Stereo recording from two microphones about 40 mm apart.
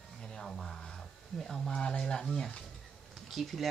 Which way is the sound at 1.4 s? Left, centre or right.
Centre.